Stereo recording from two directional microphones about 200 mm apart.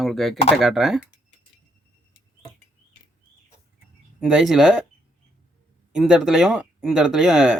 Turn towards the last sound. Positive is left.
turn(degrees=-5)  # may be behind; listen again after turning